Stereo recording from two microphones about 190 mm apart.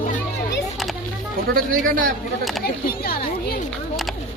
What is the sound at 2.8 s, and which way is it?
Speech, 50° left (ahead or behind).